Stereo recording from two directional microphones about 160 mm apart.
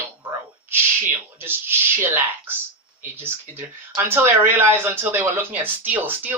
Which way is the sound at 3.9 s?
15° right (ahead or behind).